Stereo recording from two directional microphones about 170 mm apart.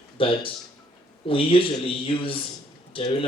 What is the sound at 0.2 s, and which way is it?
A man's voice, 30° left (ahead or behind).